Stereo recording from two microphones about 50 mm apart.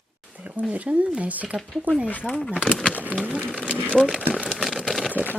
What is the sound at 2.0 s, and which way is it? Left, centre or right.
Speech, left.